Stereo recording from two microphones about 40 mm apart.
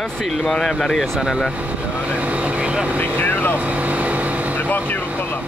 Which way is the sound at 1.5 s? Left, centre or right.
Right.